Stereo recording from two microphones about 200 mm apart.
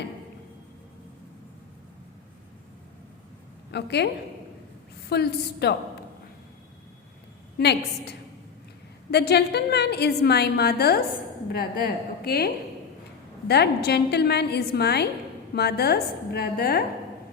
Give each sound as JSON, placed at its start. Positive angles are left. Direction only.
{"t": 3.7, "sound": "a woman's voice", "side_deg": 60}
{"t": 9.0, "sound": "a woman's voice", "side_deg": 55}
{"t": 13.5, "sound": "a woman's voice", "side_deg": 55}